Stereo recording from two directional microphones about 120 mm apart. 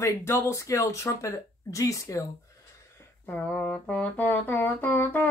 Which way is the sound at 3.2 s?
15° left (ahead or behind).